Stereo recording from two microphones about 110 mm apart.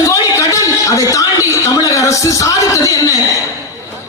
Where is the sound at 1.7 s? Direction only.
30° left (ahead or behind).